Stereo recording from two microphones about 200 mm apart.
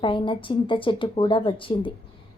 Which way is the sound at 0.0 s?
25° left (ahead or behind).